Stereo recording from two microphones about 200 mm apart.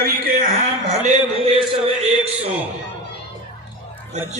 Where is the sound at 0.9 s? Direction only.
35° right (ahead or behind).